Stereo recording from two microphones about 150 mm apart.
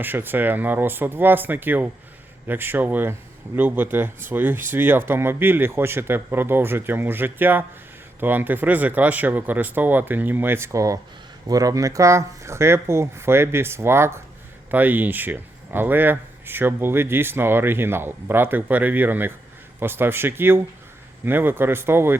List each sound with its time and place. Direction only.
0.0 s speech: 15° right (ahead or behind)